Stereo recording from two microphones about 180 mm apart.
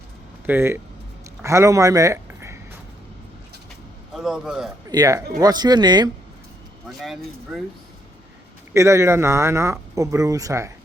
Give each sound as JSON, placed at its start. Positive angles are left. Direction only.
{"t": 0.4, "sound": "speech", "side_deg": -10}
{"t": 4.1, "sound": "a man's voice", "side_deg": -5}
{"t": 4.9, "sound": "speech", "side_deg": -20}
{"t": 6.8, "sound": "speech", "side_deg": 0}
{"t": 8.7, "sound": "speech", "side_deg": -15}